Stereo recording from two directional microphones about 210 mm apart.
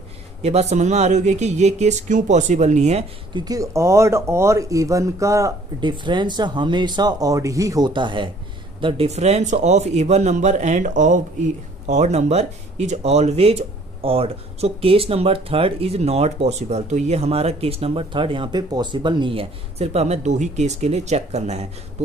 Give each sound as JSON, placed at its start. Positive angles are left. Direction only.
{"t": 0.4, "sound": "a man's voice", "side_deg": -30}
{"t": 3.3, "sound": "a man's voice", "side_deg": -20}